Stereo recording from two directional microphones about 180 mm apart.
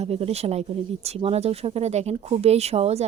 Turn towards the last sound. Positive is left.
turn(degrees=-35)  # may be behind; listen again after turning